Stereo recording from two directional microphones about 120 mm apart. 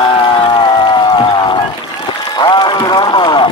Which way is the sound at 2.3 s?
40° left (ahead or behind).